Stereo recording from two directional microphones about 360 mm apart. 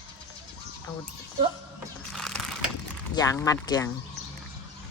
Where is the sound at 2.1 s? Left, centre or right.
Centre.